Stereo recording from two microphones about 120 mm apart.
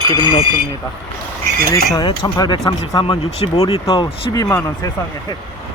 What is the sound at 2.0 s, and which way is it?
Speech, 35° left (ahead or behind).